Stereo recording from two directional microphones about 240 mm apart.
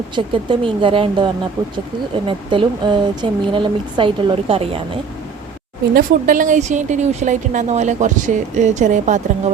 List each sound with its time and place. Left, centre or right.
0.2 s speech: right
5.9 s speech: right